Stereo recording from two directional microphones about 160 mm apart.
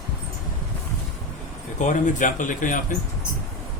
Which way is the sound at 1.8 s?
50° left (ahead or behind).